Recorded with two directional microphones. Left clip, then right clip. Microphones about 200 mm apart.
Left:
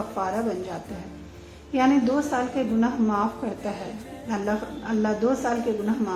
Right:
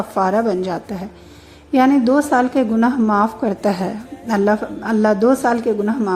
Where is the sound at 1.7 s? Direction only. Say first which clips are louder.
Right 8 dB; 45° right (ahead or behind).